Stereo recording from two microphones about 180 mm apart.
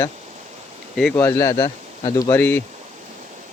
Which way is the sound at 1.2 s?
15° left (ahead or behind).